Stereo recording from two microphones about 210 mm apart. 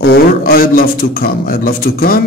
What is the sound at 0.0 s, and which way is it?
A man's voice, 50° left (ahead or behind).